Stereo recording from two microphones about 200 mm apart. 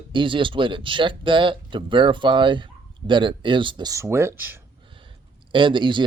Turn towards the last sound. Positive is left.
turn(degrees=-25)  # may be behind; listen again after turning